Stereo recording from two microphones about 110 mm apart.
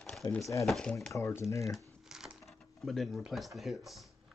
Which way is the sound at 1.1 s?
25° left (ahead or behind).